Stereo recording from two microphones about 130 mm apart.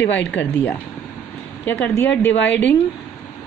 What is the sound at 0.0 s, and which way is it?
Speech, 15° left (ahead or behind).